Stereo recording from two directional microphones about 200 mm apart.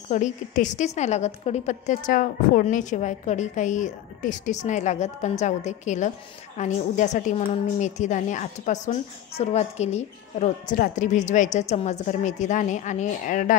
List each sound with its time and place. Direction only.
0.1 s a woman's voice: 40° left (ahead or behind)